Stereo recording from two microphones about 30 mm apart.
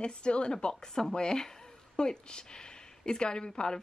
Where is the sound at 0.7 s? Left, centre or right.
Left.